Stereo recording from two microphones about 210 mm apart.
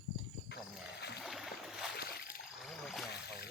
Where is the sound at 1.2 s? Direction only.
Centre (ahead or behind).